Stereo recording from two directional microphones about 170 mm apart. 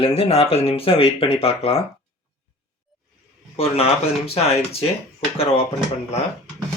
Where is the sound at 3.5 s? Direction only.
35° left (ahead or behind).